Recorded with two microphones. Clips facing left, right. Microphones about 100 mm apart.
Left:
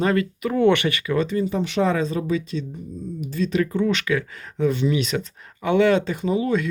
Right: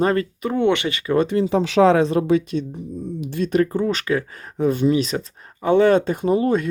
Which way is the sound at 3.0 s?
75° right (ahead or behind).